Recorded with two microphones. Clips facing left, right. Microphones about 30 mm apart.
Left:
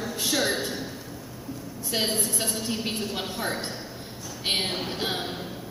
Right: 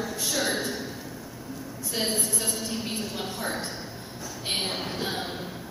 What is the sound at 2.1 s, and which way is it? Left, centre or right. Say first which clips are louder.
Speech: left 1 dB; left.